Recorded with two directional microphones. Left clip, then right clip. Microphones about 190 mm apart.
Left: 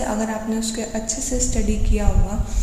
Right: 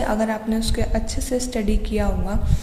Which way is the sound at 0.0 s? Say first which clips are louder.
Right 2 dB; 35° right (ahead or behind).